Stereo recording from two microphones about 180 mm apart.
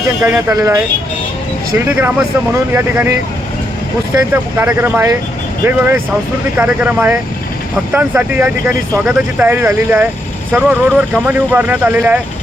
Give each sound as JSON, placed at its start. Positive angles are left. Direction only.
{"t": 0.2, "sound": "speech", "side_deg": -10}
{"t": 1.8, "sound": "speech", "side_deg": -10}
{"t": 4.5, "sound": "speech", "side_deg": -10}